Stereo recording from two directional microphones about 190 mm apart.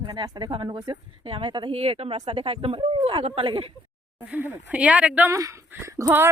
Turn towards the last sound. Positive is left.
turn(degrees=-10)  # may be behind; listen again after turning